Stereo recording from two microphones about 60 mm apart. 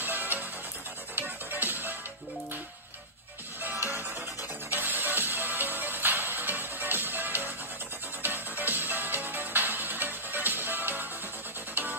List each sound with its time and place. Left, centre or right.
0.0 s music: right
3.6 s music: right